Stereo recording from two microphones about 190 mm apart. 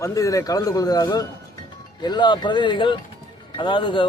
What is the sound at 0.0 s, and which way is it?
A man's voice, 15° left (ahead or behind).